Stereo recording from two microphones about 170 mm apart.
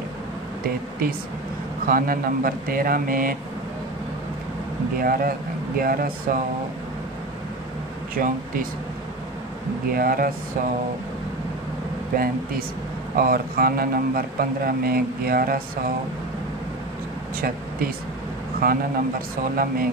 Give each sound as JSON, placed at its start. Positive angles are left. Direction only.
{"t": 1.9, "sound": "a man's voice", "side_deg": -55}
{"t": 5.0, "sound": "a man's voice", "side_deg": -60}
{"t": 8.2, "sound": "a man's voice", "side_deg": -55}
{"t": 9.9, "sound": "a man's voice", "side_deg": -55}
{"t": 13.1, "sound": "a man's voice", "side_deg": -60}
{"t": 17.4, "sound": "a man's voice", "side_deg": -60}